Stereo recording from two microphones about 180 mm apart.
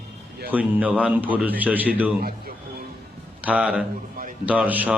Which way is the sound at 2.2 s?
55° right (ahead or behind).